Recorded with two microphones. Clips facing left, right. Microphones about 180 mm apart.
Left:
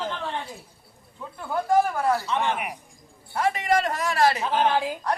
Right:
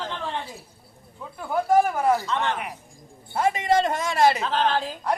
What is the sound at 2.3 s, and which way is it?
Speech, 10° left (ahead or behind).